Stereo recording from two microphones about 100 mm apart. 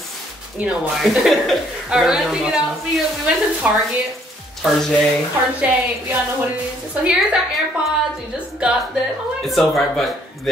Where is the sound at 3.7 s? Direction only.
15° right (ahead or behind).